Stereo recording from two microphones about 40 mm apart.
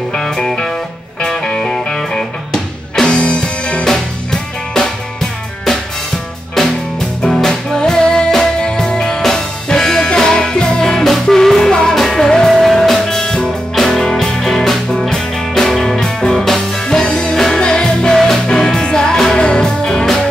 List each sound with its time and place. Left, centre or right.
0.1 s music: centre
3.8 s music: centre
7.2 s music: centre
7.7 s music: centre